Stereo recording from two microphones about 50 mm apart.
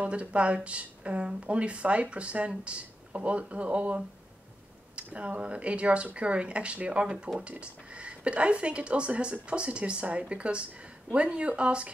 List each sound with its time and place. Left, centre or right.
0.0 s speech: right